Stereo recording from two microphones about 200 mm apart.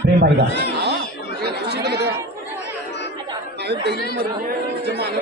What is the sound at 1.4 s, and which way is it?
Chatter, 55° right (ahead or behind).